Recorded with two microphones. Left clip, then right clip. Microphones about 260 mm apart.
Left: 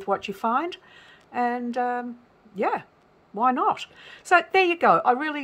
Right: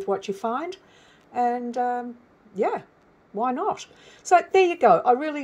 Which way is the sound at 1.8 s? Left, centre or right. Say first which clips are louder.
Even; left.